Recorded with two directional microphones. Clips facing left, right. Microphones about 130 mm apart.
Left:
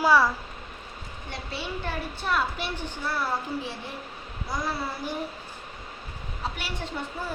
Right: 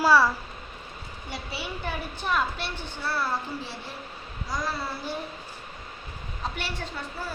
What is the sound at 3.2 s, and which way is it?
Speech, 15° left (ahead or behind).